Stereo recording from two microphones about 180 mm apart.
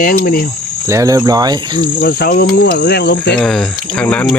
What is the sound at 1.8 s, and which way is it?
Cricket, 50° left (ahead or behind).